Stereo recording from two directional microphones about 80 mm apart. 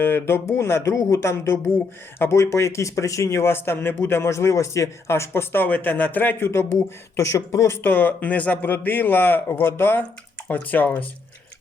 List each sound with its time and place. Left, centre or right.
0.0 s speech: left
7.8 s speech: left